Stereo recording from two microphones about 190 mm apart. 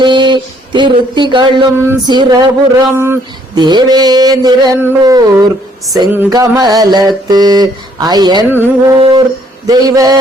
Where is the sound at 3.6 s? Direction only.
20° right (ahead or behind).